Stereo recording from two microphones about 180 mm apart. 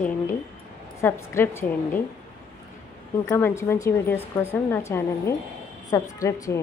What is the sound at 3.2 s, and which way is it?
A woman's voice, 15° left (ahead or behind).